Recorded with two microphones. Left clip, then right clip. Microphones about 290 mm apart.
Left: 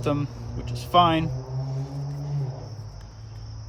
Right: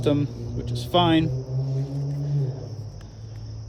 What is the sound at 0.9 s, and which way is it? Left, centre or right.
Speech, centre.